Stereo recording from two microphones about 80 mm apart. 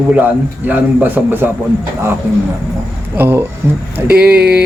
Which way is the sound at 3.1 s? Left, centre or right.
Right.